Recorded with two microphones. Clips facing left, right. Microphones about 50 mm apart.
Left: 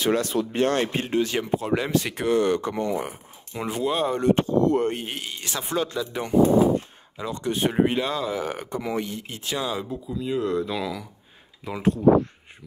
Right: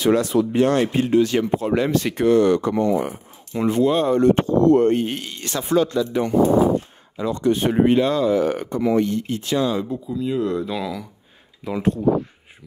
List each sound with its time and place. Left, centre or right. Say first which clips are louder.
0.0 s speech: right 5 dB; right
0.7 s speech: right 6 dB; left
1.3 s speech: right 4 dB; centre
2.4 s speech: right 5 dB; centre
2.9 s speech: right 6 dB; centre